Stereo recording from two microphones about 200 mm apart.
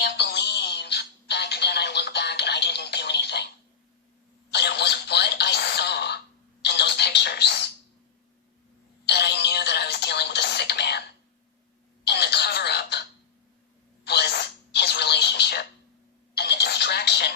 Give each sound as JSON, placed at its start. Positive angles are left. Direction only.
{"t": 0.2, "sound": "music", "side_deg": 55}
{"t": 4.5, "sound": "telephone", "side_deg": 55}
{"t": 9.0, "sound": "music", "side_deg": 55}
{"t": 12.0, "sound": "a sound", "side_deg": 55}
{"t": 14.0, "sound": "a sound", "side_deg": 55}
{"t": 16.3, "sound": "telephone", "side_deg": 55}